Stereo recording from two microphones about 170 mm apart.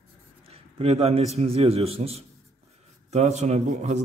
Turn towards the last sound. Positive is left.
turn(degrees=-40)  # may be behind; listen again after turning